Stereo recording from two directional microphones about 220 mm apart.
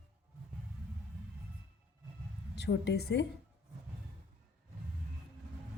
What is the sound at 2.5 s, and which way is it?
Speech, 50° left (ahead or behind).